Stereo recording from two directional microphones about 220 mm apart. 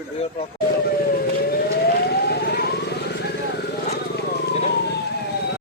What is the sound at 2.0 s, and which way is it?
Vehicle, 45° left (ahead or behind).